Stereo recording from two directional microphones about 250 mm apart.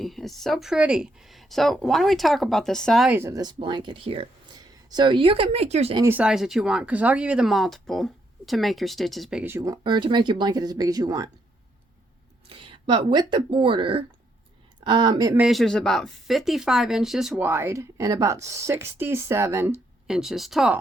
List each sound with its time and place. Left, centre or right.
0.0 s speech: centre; by 6.1 s right
6.1 s speech: centre
12.5 s speech: centre
15.4 s speech: centre